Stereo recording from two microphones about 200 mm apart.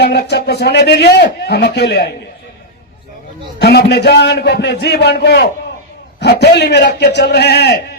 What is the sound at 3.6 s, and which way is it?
A man's voice, 55° left (ahead or behind).